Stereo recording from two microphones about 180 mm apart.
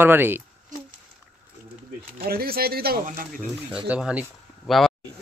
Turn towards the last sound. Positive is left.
turn(degrees=0)  # may be behind; listen again after turning